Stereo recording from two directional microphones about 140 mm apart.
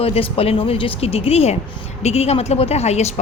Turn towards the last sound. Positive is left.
turn(degrees=50)  # may be behind; listen again after turning